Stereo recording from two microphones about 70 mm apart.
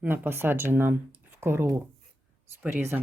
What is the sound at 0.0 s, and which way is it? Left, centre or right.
Speech, right.